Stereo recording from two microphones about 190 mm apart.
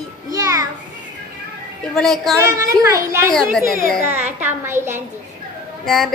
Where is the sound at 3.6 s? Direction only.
50° left (ahead or behind).